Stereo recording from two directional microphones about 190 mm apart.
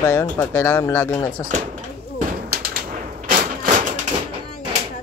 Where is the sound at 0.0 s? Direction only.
15° left (ahead or behind).